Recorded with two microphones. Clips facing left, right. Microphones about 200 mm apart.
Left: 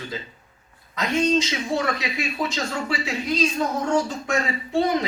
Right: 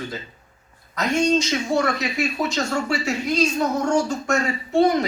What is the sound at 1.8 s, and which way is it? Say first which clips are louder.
Speech: right 3 dB; 45° right (ahead or behind).